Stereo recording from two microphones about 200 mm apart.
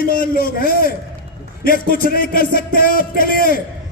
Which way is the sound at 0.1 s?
45° left (ahead or behind).